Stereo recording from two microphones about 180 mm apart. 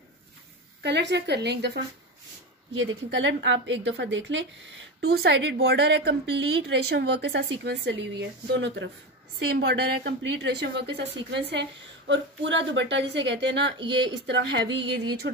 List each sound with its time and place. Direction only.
0.8 s a woman's voice: 70° right (ahead or behind)
2.8 s a woman's voice: 90° right
9.4 s a woman's voice: 65° right (ahead or behind)
12.1 s a woman's voice: 85° right; by 15.3 s 70° right (ahead or behind)